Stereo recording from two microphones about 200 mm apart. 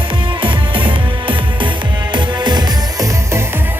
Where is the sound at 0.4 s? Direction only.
25° right (ahead or behind).